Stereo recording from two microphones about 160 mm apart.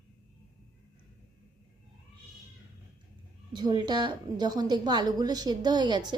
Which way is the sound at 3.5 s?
25° right (ahead or behind).